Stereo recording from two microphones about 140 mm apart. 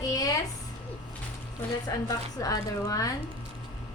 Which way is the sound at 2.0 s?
25° left (ahead or behind).